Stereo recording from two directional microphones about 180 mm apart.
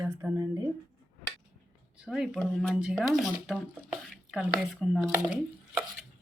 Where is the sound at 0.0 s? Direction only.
15° right (ahead or behind).